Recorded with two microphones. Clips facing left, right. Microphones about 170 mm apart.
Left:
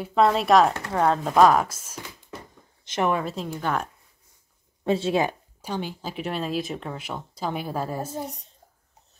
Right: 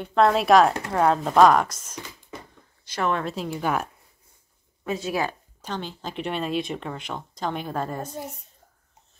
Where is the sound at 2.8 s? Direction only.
20° left (ahead or behind).